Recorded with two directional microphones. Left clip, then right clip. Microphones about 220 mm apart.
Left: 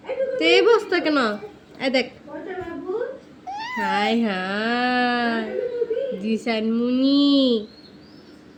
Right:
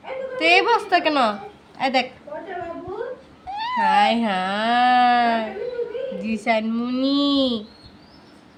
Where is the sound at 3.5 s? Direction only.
15° right (ahead or behind).